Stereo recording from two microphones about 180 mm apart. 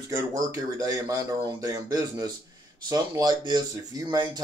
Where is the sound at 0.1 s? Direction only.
20° right (ahead or behind).